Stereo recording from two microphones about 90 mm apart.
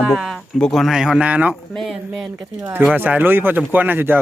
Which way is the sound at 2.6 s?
25° right (ahead or behind).